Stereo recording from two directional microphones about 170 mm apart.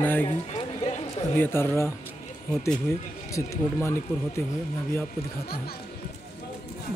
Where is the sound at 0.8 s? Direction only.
40° left (ahead or behind).